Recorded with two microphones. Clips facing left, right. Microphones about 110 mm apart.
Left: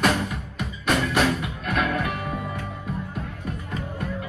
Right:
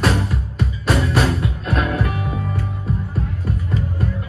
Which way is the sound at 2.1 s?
5° right (ahead or behind).